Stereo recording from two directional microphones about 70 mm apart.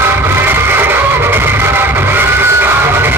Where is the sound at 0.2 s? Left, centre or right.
Right.